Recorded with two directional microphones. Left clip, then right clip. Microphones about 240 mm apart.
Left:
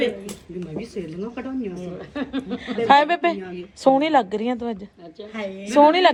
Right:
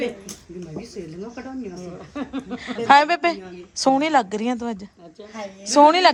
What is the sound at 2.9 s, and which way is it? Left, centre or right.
Speech, centre.